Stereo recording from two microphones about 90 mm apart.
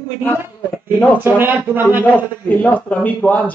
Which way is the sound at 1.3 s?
25° right (ahead or behind).